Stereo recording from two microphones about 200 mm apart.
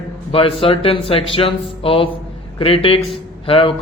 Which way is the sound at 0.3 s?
25° left (ahead or behind).